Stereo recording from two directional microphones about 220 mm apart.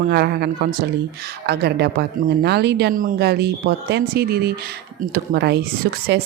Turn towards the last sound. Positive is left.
turn(degrees=-50)  # may be behind; listen again after turning